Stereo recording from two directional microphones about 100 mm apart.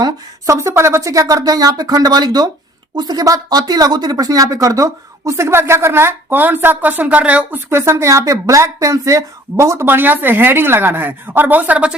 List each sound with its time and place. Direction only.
0.0 s speech: 30° right (ahead or behind); by 11.9 s 15° right (ahead or behind)